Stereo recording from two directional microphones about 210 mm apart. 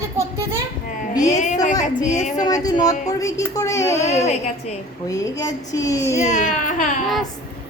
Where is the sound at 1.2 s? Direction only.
35° left (ahead or behind).